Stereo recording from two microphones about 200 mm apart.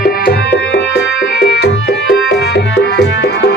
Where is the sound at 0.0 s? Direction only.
50° left (ahead or behind).